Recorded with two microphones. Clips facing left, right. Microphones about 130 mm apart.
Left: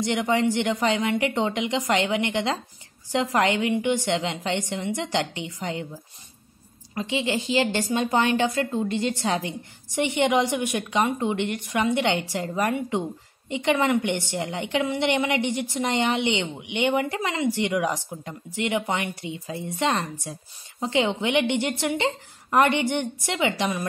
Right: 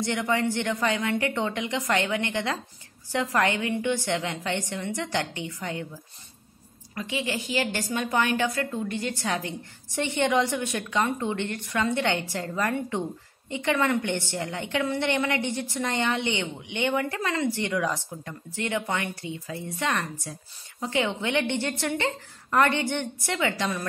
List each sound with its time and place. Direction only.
0.0 s a woman's voice: 20° left (ahead or behind)
7.0 s a woman's voice: 25° left (ahead or behind)